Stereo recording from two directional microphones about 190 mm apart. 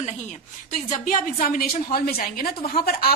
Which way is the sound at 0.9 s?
45° left (ahead or behind).